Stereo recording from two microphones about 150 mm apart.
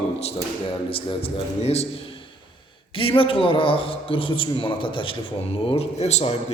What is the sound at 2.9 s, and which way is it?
A man's voice, 35° left (ahead or behind).